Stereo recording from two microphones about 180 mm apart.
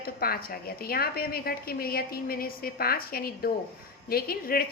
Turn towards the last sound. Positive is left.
turn(degrees=55)  # may be behind; listen again after turning